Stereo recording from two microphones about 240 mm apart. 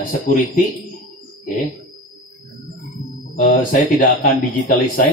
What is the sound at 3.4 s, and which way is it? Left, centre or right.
Speech, left.